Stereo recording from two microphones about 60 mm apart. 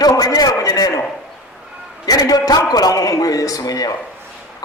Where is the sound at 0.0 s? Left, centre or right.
Left.